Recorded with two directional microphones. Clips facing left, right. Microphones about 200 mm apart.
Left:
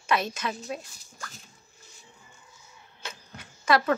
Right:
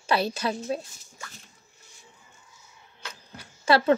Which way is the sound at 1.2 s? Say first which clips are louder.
Left 1 dB; centre (ahead or behind).